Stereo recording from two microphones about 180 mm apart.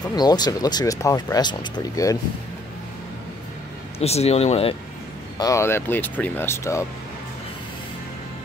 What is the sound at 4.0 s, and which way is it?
Speech, 35° left (ahead or behind).